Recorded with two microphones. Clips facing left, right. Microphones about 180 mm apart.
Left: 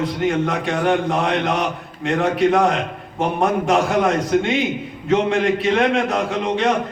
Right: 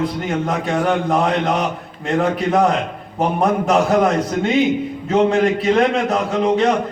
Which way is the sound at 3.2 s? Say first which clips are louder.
Right 2 dB; 35° right (ahead or behind).